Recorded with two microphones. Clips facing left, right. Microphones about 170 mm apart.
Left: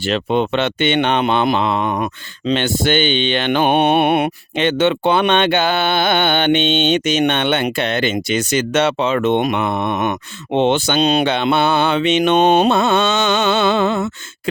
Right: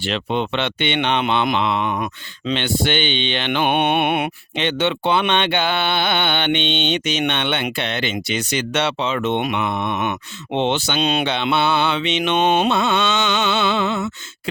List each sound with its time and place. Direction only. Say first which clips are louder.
0.0 s speech: left 5 dB; 45° left (ahead or behind)